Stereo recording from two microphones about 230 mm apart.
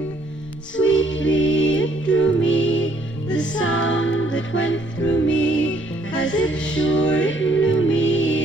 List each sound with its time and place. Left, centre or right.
0.7 s music: left